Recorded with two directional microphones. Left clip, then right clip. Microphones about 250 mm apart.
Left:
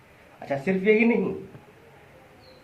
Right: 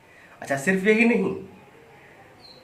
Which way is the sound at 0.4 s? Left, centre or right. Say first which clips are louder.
Right 1 dB; right.